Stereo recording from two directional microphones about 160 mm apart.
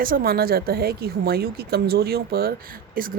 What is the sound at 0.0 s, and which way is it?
A woman's voice, 65° right (ahead or behind).